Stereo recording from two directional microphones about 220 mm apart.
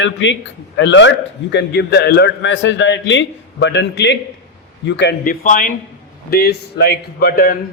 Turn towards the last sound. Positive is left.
turn(degrees=45)  # may be behind; listen again after turning